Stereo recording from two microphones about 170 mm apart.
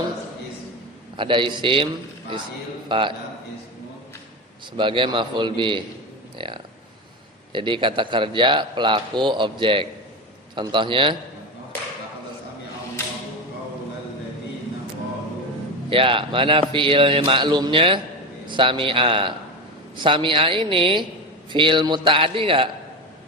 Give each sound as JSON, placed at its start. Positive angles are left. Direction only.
{"t": 1.1, "sound": "a man's voice", "side_deg": -30}
{"t": 2.9, "sound": "a man's voice", "side_deg": -30}
{"t": 4.8, "sound": "a man's voice", "side_deg": -30}
{"t": 15.9, "sound": "a man's voice", "side_deg": -30}